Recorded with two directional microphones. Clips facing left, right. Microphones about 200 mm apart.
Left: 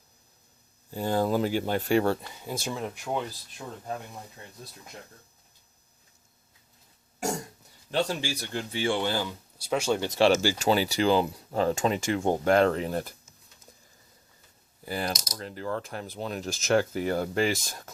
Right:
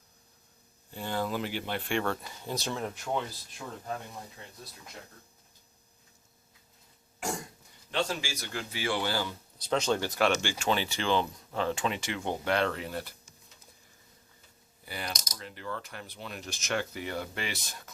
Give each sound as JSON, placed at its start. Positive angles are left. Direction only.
{"t": 0.9, "sound": "speech", "side_deg": 40}
{"t": 2.4, "sound": "speech", "side_deg": 10}
{"t": 7.9, "sound": "speech", "side_deg": 35}
{"t": 10.4, "sound": "speech", "side_deg": 35}
{"t": 14.8, "sound": "typing", "side_deg": 40}
{"t": 15.3, "sound": "speech", "side_deg": 40}